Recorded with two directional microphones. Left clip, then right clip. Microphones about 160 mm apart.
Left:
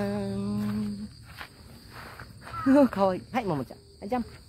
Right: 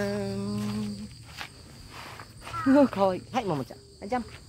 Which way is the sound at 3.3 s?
25° left (ahead or behind).